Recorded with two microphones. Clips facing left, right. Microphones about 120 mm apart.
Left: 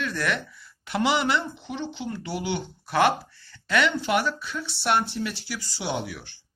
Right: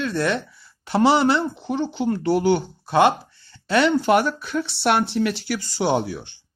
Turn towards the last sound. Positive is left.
turn(degrees=-30)  # may be behind; listen again after turning